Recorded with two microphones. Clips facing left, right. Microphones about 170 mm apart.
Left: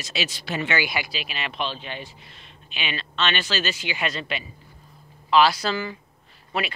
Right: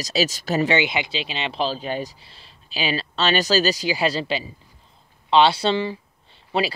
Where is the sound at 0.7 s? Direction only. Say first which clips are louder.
Right 5 dB; 20° right (ahead or behind).